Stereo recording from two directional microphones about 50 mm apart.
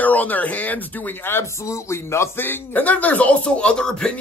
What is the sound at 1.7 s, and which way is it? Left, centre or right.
Speech, left.